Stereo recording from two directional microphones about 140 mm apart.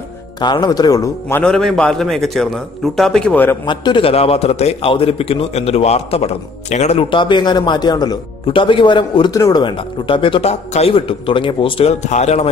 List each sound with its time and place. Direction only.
0.4 s a man's voice: 30° left (ahead or behind)
1.4 s a man's voice: 5° left (ahead or behind)
3.6 s a man's voice: 35° left (ahead or behind)
12.1 s a man's voice: 50° left (ahead or behind)